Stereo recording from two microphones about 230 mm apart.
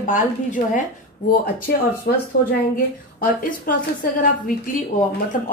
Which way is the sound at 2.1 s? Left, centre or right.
Left.